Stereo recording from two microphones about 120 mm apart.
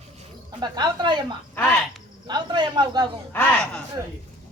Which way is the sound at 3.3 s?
15° left (ahead or behind).